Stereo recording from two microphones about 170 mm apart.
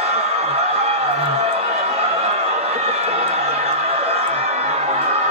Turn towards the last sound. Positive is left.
turn(degrees=-40)  # may be behind; listen again after turning